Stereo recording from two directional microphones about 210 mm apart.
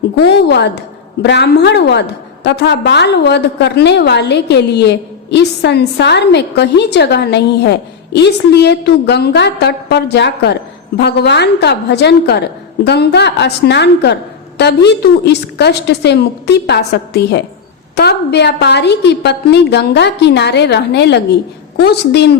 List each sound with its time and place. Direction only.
0.2 s a woman's voice: 50° left (ahead or behind)